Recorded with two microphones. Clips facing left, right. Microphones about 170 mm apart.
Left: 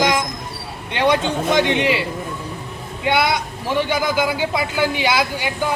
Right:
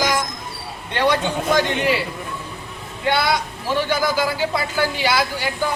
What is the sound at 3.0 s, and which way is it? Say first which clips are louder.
A man's voice: left 1 dB; 20° left (ahead or behind).